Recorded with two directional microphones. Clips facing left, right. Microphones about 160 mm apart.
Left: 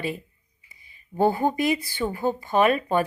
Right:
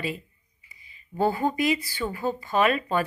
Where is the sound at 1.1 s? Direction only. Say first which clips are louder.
Left 3 dB; 20° left (ahead or behind).